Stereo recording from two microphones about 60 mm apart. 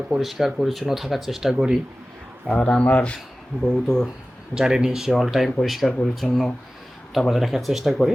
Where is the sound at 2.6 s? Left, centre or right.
Left.